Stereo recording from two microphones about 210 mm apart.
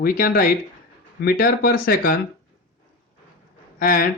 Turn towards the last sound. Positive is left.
turn(degrees=40)  # may be behind; listen again after turning